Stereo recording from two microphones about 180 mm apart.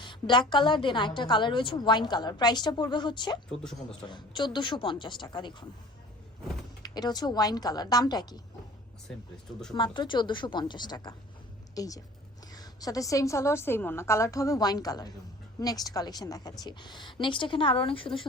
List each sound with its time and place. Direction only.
0.0 s a woman's voice: 25° left (ahead or behind)
3.5 s speech: 5° left (ahead or behind)
3.8 s a woman's voice: 25° left (ahead or behind)
6.8 s a woman's voice: 20° left (ahead or behind)
9.7 s a woman's voice: 25° left (ahead or behind)